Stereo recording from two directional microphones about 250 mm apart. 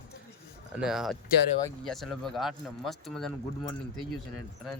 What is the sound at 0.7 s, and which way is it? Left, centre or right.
Speech, centre.